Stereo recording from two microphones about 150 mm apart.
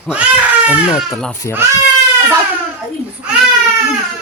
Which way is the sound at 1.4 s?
20° left (ahead or behind).